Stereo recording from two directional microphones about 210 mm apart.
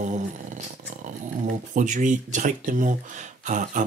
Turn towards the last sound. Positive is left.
turn(degrees=-35)  # may be behind; listen again after turning